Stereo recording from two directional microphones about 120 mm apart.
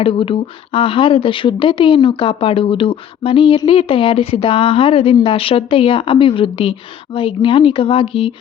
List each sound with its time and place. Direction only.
0.0 s speech: 45° left (ahead or behind)